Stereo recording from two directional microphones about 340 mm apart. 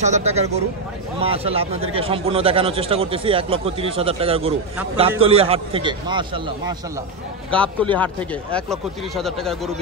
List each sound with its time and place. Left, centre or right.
0.0 s a man's voice: centre
7.5 s speech: centre